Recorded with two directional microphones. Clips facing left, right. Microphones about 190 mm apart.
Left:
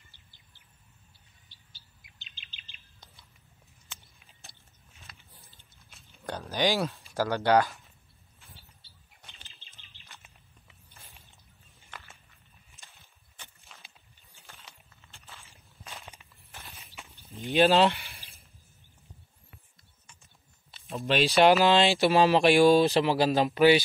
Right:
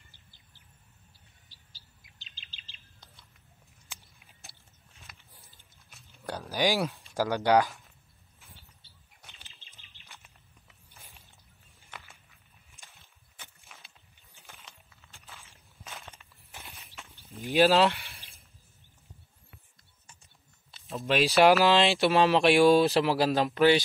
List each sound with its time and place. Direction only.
1.5 s chirp: 35° right (ahead or behind)
3.9 s biting: 5° right (ahead or behind)
5.9 s speech: 5° right (ahead or behind)
9.2 s bird: centre (ahead or behind)
11.9 s walk: 5° right (ahead or behind)
13.0 s a sound: 5° right (ahead or behind)
15.4 s walk: centre (ahead or behind)
17.5 s speech: centre (ahead or behind)
20.9 s speech: centre (ahead or behind)